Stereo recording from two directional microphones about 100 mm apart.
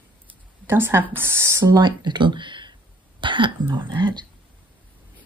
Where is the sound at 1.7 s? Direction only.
50° right (ahead or behind).